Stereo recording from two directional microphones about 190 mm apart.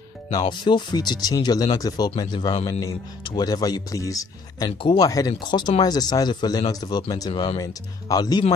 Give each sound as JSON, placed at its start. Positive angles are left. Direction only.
{"t": 0.3, "sound": "speech", "side_deg": 25}